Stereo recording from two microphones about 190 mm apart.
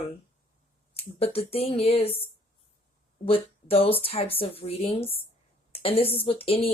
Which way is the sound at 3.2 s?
30° left (ahead or behind).